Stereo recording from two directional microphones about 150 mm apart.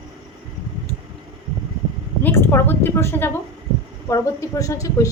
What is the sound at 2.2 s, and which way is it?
A woman's voice, 15° left (ahead or behind).